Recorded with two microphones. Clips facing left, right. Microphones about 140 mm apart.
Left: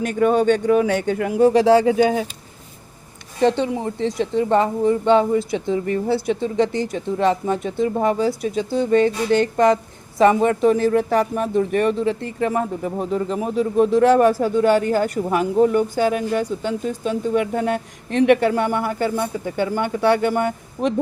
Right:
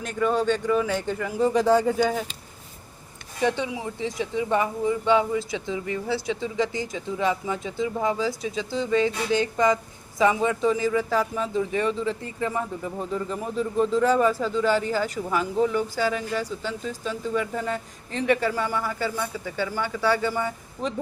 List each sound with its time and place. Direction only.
0.0 s speech: 65° left (ahead or behind)
3.4 s speech: 65° left (ahead or behind)